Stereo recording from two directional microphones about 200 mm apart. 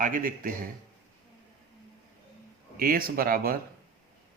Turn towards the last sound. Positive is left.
turn(degrees=-45)  # may be behind; listen again after turning